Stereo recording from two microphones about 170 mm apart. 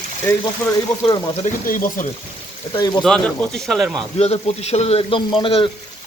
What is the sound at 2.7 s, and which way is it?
Speech, 25° left (ahead or behind).